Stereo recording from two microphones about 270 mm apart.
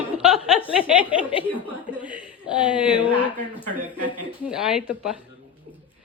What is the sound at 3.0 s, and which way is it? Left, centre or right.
Speech, centre.